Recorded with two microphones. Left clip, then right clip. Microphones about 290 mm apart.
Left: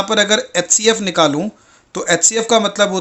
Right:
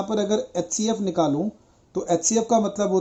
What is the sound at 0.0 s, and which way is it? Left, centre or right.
Speech, left.